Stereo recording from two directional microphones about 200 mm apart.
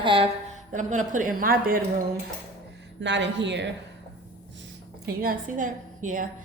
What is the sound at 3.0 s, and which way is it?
Speech, 60° right (ahead or behind).